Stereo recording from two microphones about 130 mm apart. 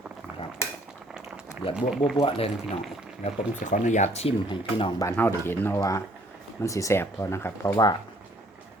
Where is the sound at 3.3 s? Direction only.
70° left (ahead or behind).